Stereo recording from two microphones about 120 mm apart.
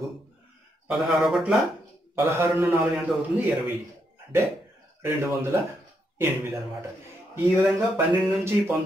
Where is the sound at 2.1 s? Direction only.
20° right (ahead or behind).